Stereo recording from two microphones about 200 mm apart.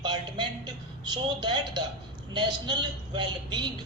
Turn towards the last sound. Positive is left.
turn(degrees=-20)  # may be behind; listen again after turning